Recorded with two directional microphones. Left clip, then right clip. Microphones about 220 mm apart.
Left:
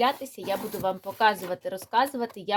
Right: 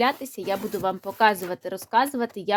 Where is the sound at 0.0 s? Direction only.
45° right (ahead or behind).